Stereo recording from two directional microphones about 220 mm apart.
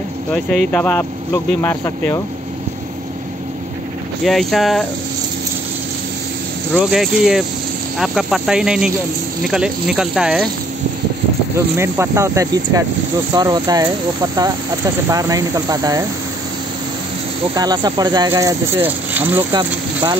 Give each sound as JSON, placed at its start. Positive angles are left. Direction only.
{"t": 0.3, "sound": "speech", "side_deg": 5}
{"t": 4.2, "sound": "speech", "side_deg": 0}
{"t": 6.7, "sound": "speech", "side_deg": 0}
{"t": 11.5, "sound": "speech", "side_deg": -10}
{"t": 17.6, "sound": "speech", "side_deg": -20}